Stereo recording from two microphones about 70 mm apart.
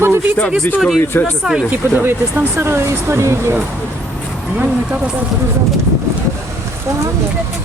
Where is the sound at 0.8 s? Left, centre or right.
Centre.